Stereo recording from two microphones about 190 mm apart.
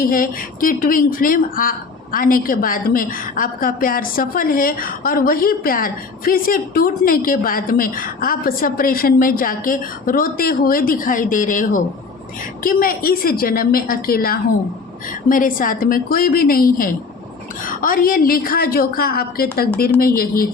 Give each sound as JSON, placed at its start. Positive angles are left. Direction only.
{"t": 0.0, "sound": "a woman's voice", "side_deg": 50}